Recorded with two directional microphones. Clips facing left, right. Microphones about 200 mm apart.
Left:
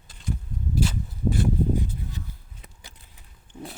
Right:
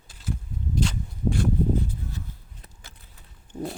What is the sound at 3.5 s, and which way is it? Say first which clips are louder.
Pig: right 7 dB; 40° right (ahead or behind).